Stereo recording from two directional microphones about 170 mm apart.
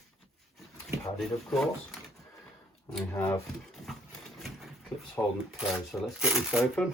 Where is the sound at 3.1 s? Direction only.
15° left (ahead or behind).